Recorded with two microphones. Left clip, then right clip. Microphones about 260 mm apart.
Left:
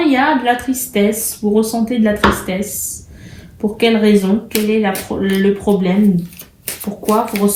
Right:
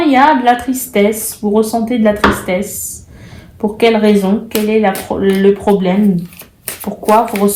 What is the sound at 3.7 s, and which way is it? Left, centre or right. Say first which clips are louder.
Speech: right 3 dB; right.